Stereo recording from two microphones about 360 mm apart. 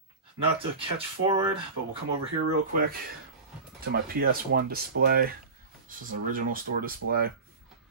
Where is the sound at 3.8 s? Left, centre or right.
Right.